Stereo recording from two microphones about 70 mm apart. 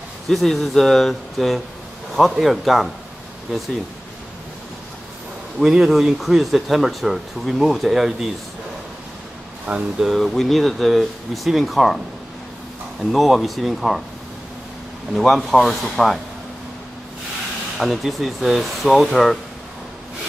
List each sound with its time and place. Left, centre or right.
0.3 s speech: centre
5.6 s speech: centre
9.7 s speech: centre
10.0 s speech: centre
13.1 s speech: centre
15.1 s speech: centre
17.7 s speech: centre